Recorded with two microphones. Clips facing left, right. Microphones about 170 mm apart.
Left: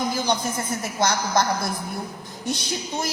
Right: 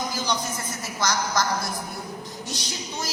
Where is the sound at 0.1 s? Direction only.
55° left (ahead or behind).